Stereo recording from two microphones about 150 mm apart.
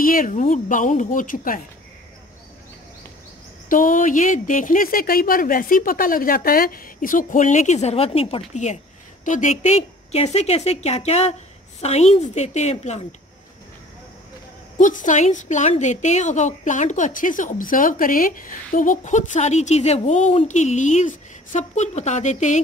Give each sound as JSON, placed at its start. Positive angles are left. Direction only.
{"t": 0.0, "sound": "speech", "side_deg": 70}
{"t": 3.6, "sound": "speech", "side_deg": 65}
{"t": 9.2, "sound": "a woman's voice", "side_deg": 55}
{"t": 14.8, "sound": "a woman's voice", "side_deg": 60}